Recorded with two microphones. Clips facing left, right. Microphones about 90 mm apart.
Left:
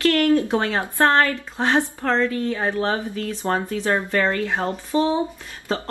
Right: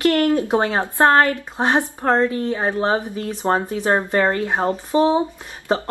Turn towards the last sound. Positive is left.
turn(degrees=-20)  # may be behind; listen again after turning